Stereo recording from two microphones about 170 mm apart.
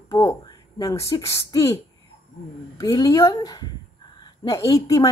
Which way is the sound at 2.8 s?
20° left (ahead or behind).